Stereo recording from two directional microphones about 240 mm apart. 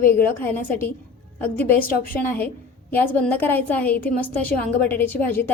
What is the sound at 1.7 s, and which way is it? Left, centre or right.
Speech, left.